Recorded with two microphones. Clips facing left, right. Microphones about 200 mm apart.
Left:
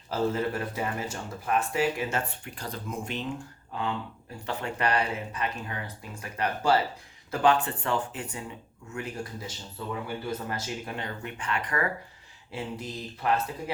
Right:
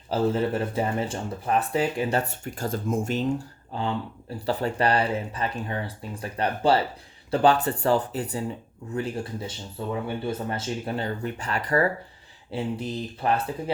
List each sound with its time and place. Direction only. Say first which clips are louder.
0.1 s speech: right 4 dB; 30° right (ahead or behind)